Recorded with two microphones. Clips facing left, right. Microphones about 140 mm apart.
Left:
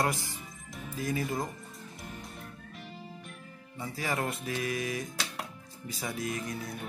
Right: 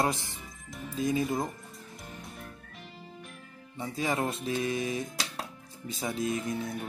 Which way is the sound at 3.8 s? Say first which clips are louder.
Right 3 dB; 20° right (ahead or behind).